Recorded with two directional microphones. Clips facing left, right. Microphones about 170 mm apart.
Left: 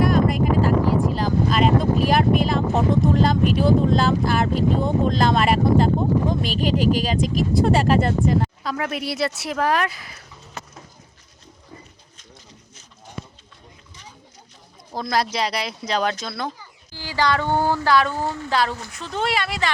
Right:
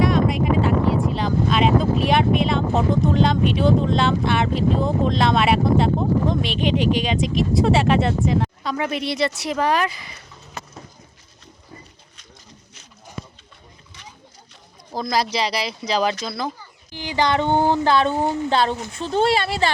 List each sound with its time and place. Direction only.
0.0 s a sound: centre (ahead or behind)
0.9 s speech: centre (ahead or behind)
14.9 s speech: centre (ahead or behind)
16.9 s speech: 20° right (ahead or behind)